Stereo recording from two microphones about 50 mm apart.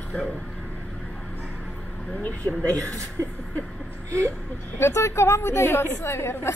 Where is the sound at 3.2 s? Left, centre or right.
Right.